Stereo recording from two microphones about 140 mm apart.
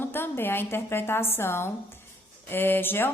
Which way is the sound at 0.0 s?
15° left (ahead or behind).